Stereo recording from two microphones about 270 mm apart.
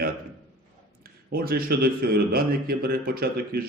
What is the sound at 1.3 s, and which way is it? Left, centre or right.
A man's voice, right.